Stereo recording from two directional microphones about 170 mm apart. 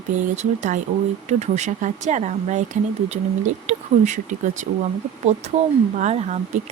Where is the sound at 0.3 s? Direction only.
45° right (ahead or behind).